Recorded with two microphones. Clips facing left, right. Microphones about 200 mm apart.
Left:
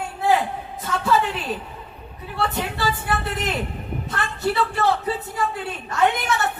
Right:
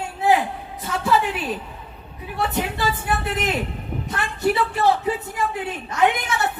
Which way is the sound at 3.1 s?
20° right (ahead or behind).